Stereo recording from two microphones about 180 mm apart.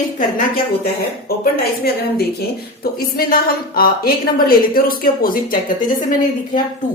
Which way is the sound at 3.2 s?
55° left (ahead or behind).